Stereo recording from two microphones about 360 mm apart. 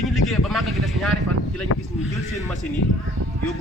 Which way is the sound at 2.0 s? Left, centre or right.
Centre.